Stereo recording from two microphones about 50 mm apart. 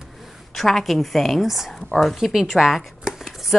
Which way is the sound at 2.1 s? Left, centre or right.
Centre.